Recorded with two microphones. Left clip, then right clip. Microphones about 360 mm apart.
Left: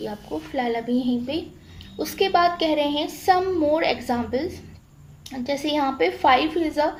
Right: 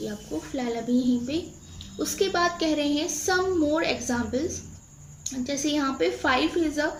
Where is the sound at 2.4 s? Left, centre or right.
Centre.